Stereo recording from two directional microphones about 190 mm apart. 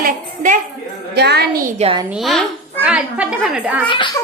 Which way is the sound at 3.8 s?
25° left (ahead or behind).